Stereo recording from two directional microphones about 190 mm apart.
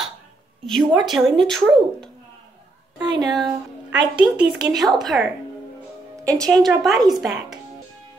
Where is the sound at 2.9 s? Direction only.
20° right (ahead or behind).